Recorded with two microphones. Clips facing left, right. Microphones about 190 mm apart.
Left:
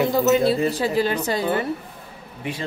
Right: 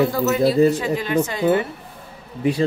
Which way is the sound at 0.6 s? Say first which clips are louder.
Right 1 dB; 35° left (ahead or behind).